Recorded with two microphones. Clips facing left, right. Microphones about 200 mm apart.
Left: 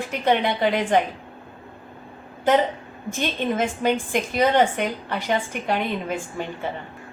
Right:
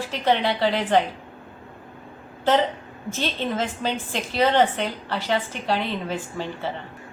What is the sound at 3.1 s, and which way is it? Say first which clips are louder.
A woman's voice: left 2 dB; 15° left (ahead or behind).